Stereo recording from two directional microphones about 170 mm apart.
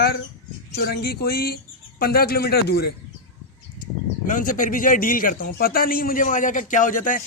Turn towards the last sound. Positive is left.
turn(degrees=50)  # may be behind; listen again after turning